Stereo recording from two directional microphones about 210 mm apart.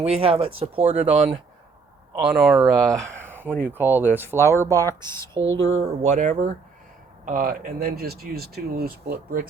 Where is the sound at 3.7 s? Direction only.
10° right (ahead or behind).